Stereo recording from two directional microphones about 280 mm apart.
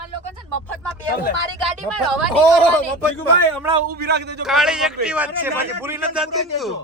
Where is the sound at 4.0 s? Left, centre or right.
Right.